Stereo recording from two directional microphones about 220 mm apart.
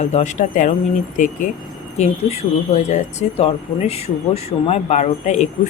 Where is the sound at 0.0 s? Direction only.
30° left (ahead or behind).